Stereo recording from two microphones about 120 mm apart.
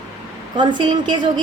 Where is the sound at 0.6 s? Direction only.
40° right (ahead or behind).